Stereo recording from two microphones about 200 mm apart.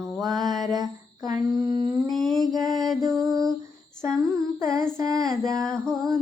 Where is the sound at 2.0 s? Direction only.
Centre (ahead or behind).